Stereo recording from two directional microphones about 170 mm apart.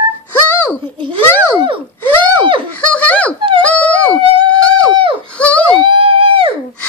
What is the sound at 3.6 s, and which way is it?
Dog, 10° left (ahead or behind).